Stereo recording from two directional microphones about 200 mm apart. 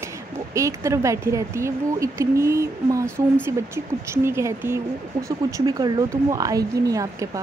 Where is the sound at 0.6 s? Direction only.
15° right (ahead or behind).